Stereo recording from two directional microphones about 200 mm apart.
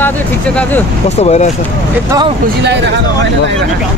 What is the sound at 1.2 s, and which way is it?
Speech, 35° left (ahead or behind).